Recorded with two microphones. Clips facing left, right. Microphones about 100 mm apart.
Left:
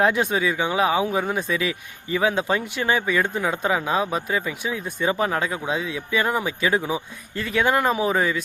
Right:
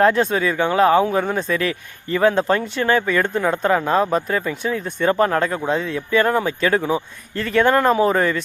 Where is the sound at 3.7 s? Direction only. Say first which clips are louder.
Right 5 dB; 50° right (ahead or behind).